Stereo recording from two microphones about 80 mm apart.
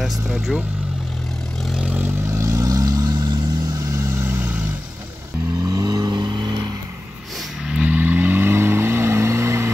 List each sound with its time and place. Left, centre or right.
0.0 s speech: centre
1.6 s vehicle: centre
1.9 s vehicle: right
2.2 s vehicle: right
5.6 s vehicle: right
7.6 s vehicle: centre; by 9.7 s right